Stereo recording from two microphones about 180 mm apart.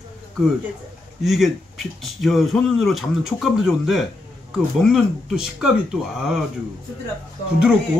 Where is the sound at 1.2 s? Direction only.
Centre (ahead or behind).